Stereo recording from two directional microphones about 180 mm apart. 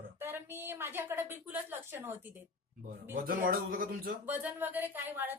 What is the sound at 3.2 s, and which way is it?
Speech, 50° right (ahead or behind).